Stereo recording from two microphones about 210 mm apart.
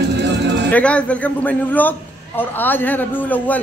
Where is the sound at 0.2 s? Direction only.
55° right (ahead or behind).